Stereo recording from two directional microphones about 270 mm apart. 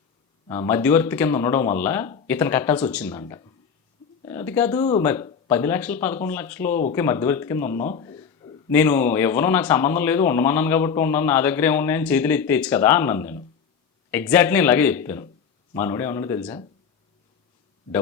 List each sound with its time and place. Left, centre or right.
0.4 s speech: centre
4.8 s speech: left
5.0 s speech: centre
7.9 s a sound: centre
8.7 s speech: centre